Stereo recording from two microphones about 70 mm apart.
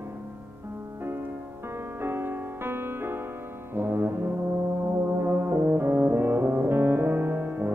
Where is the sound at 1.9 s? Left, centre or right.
Right.